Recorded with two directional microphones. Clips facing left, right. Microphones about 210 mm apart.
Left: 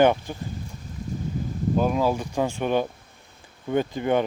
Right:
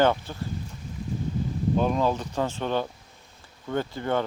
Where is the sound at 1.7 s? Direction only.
5° left (ahead or behind).